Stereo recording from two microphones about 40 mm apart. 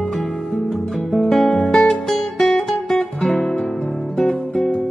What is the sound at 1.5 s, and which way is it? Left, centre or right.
Guitar, left.